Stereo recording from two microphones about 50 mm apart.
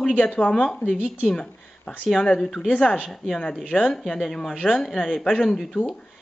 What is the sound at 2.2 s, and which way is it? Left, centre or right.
Speech, centre.